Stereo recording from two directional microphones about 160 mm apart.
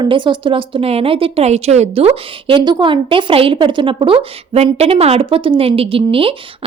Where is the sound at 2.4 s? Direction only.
30° right (ahead or behind).